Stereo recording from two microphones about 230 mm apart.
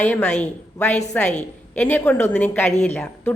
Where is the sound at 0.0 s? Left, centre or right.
Centre.